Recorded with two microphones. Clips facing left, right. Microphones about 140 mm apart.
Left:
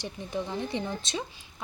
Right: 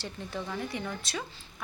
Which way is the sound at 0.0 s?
20° left (ahead or behind).